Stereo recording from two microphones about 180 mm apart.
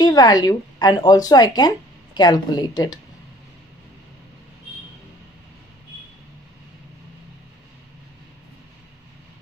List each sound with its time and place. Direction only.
0.0 s a woman's voice: 20° left (ahead or behind)